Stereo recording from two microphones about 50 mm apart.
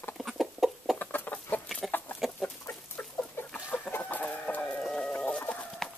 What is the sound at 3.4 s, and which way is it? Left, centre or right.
Chicken, left.